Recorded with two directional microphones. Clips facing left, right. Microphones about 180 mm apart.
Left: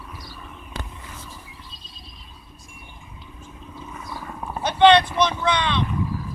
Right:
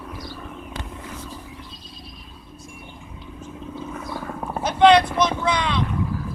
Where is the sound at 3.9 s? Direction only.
60° right (ahead or behind).